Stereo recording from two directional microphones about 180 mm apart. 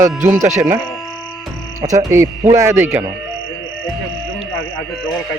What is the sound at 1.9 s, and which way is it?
Speech, 15° right (ahead or behind).